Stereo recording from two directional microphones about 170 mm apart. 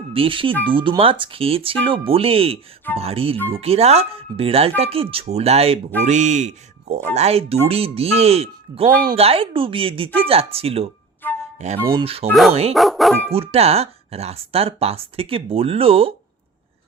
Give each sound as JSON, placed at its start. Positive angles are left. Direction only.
{"t": 0.1, "sound": "speech", "side_deg": -30}
{"t": 11.2, "sound": "flute", "side_deg": 10}
{"t": 11.6, "sound": "speech", "side_deg": -40}
{"t": 12.7, "sound": "speech", "side_deg": 0}
{"t": 13.3, "sound": "speech", "side_deg": -35}